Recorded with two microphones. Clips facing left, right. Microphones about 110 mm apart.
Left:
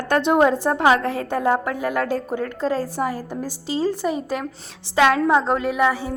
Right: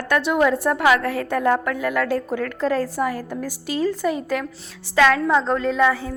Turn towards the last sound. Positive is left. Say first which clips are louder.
# right 1 dB
turn(degrees=20)  # may be behind; listen again after turning